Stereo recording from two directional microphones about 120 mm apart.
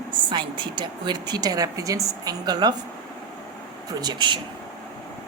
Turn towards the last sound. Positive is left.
turn(degrees=-40)  # may be behind; listen again after turning